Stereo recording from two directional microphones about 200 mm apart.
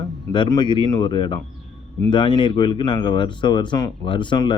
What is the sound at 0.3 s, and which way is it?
Speech, 20° left (ahead or behind).